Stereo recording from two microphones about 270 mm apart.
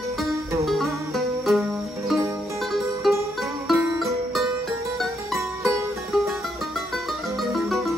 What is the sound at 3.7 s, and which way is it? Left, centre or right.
Music, centre.